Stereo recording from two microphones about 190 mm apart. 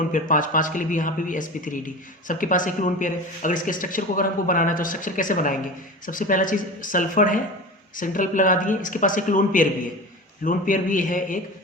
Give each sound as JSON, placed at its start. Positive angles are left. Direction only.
{"t": 0.1, "sound": "speech", "side_deg": 45}